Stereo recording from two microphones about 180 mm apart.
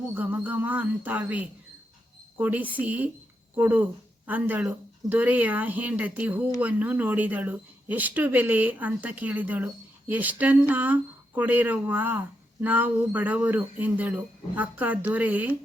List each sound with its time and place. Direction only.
0.1 s speech: 10° right (ahead or behind)